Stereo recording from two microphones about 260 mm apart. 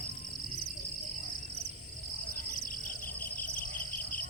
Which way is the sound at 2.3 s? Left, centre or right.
Left.